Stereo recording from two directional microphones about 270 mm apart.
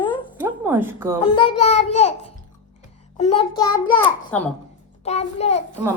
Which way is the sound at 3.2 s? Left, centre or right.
Left.